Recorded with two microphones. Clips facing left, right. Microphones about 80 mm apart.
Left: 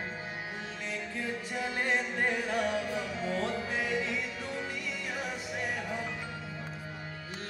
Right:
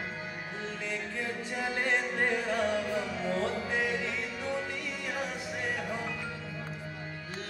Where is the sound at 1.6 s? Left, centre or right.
Right.